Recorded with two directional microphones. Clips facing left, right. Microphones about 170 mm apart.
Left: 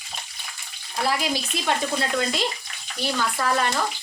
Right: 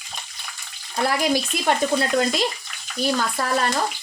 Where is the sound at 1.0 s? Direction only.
55° right (ahead or behind).